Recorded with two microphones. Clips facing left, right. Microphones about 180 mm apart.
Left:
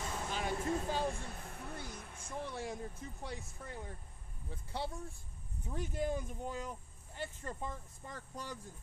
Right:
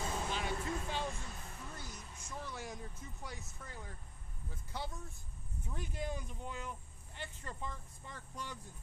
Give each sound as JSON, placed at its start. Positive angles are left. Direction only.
{"t": 0.3, "sound": "music", "side_deg": 45}
{"t": 1.3, "sound": "a sound", "side_deg": 55}
{"t": 2.4, "sound": "speech", "side_deg": 30}
{"t": 5.7, "sound": "speech", "side_deg": 45}